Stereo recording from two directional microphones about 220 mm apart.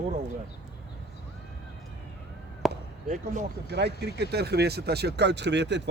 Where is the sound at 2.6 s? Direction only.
Centre (ahead or behind).